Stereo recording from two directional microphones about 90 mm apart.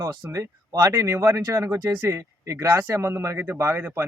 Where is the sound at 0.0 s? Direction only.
35° right (ahead or behind).